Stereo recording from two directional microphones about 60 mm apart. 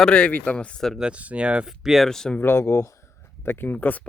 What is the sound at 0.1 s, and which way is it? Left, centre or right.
Speech, centre.